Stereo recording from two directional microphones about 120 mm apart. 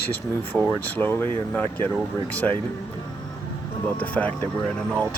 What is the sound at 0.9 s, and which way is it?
Speech, 15° left (ahead or behind).